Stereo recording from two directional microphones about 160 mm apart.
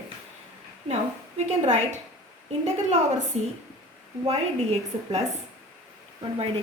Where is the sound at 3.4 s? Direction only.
40° right (ahead or behind).